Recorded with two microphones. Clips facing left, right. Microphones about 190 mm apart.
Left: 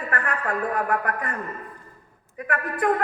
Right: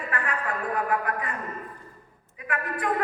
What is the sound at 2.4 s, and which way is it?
Speech, 45° left (ahead or behind).